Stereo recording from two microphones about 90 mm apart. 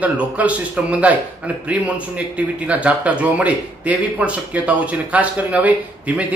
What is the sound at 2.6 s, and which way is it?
Speech, 15° right (ahead or behind).